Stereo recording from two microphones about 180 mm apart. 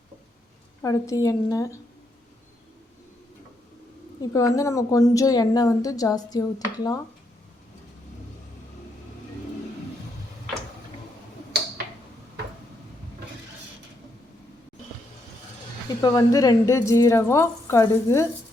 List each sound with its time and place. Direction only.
0.8 s a woman's voice: 15° left (ahead or behind)
4.3 s a woman's voice: 15° left (ahead or behind)
15.9 s a woman's voice: 20° left (ahead or behind)